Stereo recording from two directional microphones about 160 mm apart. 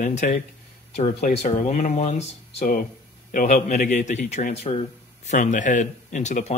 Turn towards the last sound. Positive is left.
turn(degrees=45)  # may be behind; listen again after turning